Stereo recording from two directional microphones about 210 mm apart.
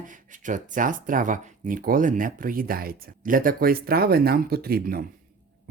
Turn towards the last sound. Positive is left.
turn(degrees=-45)  # may be behind; listen again after turning